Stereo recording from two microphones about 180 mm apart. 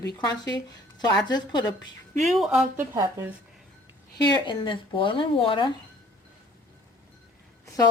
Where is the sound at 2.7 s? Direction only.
15° right (ahead or behind).